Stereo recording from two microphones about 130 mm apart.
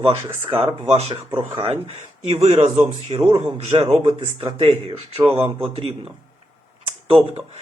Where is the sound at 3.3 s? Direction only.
40° right (ahead or behind).